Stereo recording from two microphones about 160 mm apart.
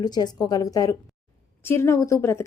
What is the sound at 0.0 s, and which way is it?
A woman's voice, 25° left (ahead or behind).